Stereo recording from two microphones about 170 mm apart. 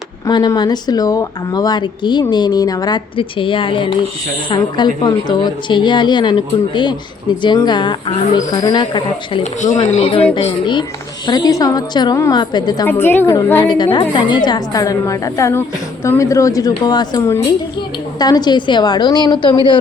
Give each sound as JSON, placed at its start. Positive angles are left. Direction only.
{"t": 0.3, "sound": "speech", "side_deg": 25}
{"t": 9.4, "sound": "speech", "side_deg": 45}
{"t": 12.9, "sound": "a woman's voice", "side_deg": 10}
{"t": 13.7, "sound": "speech", "side_deg": 25}